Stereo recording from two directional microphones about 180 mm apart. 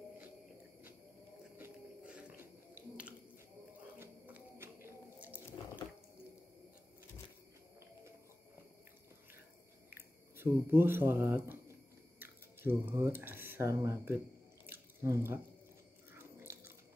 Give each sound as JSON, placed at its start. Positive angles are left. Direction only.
{"t": 1.6, "sound": "biting", "side_deg": -5}
{"t": 4.6, "sound": "squish", "side_deg": -15}
{"t": 9.8, "sound": "speech", "side_deg": -15}
{"t": 14.7, "sound": "a sound", "side_deg": -10}
{"t": 16.2, "sound": "biting", "side_deg": -15}